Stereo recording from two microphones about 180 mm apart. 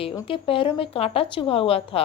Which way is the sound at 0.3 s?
30° left (ahead or behind).